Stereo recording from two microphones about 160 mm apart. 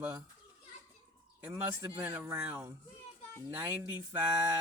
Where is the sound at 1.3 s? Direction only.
15° right (ahead or behind).